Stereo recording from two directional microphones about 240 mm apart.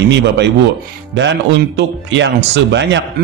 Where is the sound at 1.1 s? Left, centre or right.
Right.